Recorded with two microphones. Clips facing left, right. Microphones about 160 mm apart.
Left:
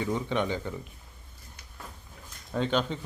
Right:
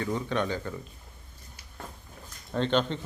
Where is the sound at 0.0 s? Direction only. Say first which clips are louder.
Even; 15° left (ahead or behind).